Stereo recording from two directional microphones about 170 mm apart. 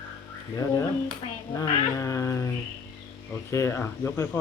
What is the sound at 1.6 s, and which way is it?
Speech, 20° left (ahead or behind).